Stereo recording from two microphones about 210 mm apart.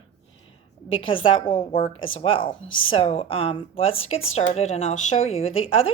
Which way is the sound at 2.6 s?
70° left (ahead or behind).